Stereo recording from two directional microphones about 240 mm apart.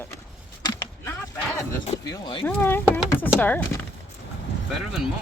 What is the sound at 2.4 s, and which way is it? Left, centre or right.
Speech, centre.